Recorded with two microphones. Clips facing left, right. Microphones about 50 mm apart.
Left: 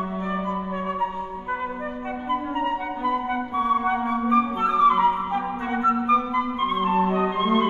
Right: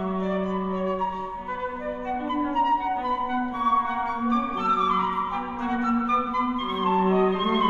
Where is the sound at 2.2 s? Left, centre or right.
Centre.